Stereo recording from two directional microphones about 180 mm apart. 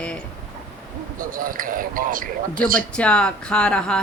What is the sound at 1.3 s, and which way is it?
Speech, 50° right (ahead or behind).